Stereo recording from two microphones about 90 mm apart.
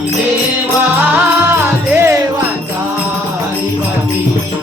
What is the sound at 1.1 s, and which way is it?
Music, 25° right (ahead or behind).